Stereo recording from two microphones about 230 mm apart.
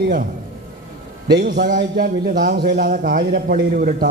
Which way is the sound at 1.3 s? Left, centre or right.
Right.